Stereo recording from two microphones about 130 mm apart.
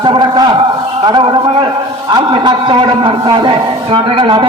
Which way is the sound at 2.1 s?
35° right (ahead or behind).